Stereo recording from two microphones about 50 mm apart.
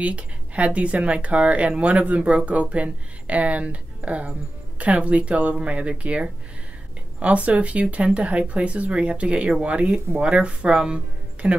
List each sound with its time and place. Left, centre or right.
0.0 s speech: right